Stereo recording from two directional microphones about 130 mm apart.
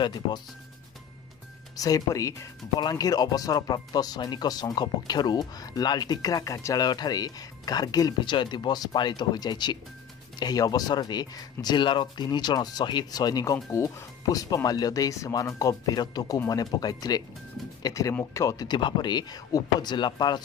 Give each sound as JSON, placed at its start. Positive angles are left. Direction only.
{"t": 0.0, "sound": "speech", "side_deg": 35}
{"t": 1.8, "sound": "speech", "side_deg": 25}